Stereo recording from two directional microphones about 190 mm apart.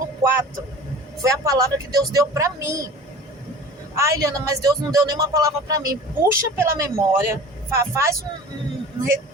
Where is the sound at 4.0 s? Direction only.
15° right (ahead or behind).